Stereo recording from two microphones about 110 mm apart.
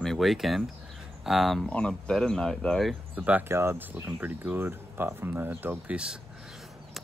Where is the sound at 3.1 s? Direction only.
15° right (ahead or behind).